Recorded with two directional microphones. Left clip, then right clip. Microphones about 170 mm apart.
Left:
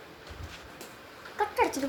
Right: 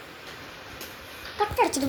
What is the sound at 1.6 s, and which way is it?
Speech, 40° right (ahead or behind).